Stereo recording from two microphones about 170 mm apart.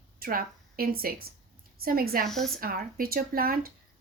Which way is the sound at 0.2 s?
60° right (ahead or behind).